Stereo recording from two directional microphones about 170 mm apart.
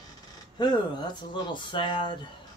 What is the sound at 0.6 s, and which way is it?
Speech, 25° left (ahead or behind).